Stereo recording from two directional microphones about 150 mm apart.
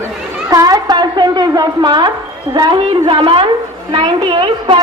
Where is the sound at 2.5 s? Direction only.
30° right (ahead or behind).